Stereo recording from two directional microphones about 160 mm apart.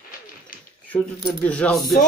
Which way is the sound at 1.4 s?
5° left (ahead or behind).